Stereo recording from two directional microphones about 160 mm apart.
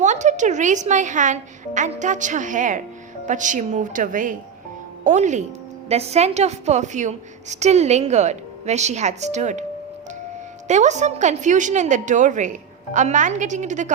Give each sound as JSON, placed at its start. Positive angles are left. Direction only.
{"t": 0.0, "sound": "a woman's voice", "side_deg": -50}
{"t": 10.7, "sound": "a woman's voice", "side_deg": -50}